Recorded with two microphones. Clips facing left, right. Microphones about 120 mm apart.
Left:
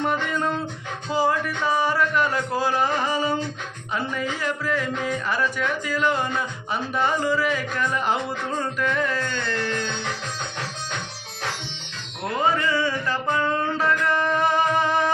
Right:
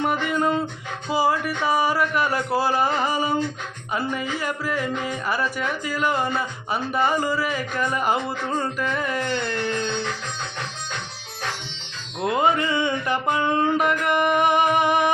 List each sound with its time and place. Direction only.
0.0 s music: 10° right (ahead or behind)
1.1 s speech: 10° right (ahead or behind)
9.1 s music: 20° right (ahead or behind)
12.2 s speech: 20° right (ahead or behind)